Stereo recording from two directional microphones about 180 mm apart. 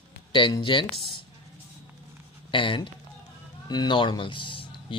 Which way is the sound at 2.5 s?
30° left (ahead or behind).